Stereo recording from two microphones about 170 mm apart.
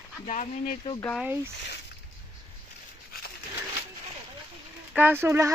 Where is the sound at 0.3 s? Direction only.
45° left (ahead or behind).